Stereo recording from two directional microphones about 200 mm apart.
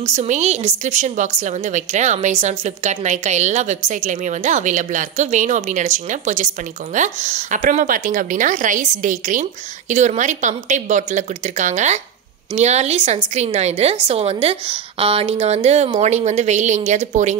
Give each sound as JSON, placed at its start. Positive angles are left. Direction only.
{"t": 0.0, "sound": "a woman's voice", "side_deg": -35}